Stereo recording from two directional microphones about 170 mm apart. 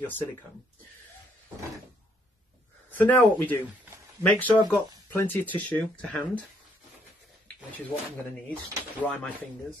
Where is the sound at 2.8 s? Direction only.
10° left (ahead or behind).